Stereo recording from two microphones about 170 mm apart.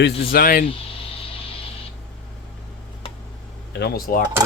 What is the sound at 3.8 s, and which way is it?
Speech, 60° left (ahead or behind).